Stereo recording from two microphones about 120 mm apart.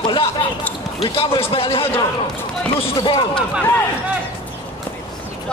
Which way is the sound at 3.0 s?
35° left (ahead or behind).